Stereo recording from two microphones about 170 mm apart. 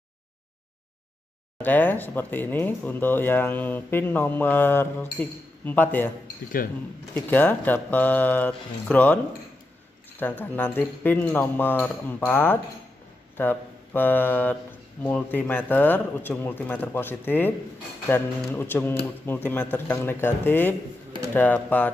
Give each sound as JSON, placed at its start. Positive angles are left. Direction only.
{"t": 1.6, "sound": "speech", "side_deg": 10}
{"t": 7.2, "sound": "speech", "side_deg": 10}